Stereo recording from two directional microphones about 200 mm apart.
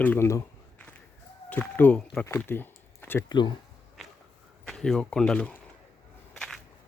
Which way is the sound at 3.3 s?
20° left (ahead or behind).